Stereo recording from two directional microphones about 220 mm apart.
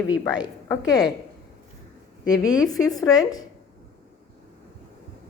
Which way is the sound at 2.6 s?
15° left (ahead or behind).